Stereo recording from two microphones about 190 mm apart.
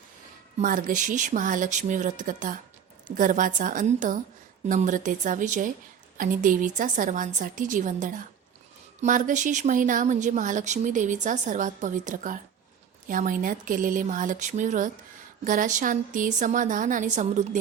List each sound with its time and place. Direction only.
0.6 s a woman's voice: 45° right (ahead or behind)